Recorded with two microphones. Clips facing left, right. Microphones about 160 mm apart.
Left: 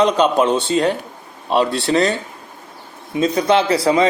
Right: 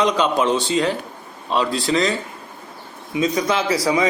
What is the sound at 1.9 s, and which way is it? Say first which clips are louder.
Speech: left 3 dB; 40° left (ahead or behind).